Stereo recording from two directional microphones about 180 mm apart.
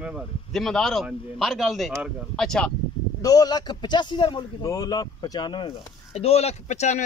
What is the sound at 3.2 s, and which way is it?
A man's voice, 20° left (ahead or behind).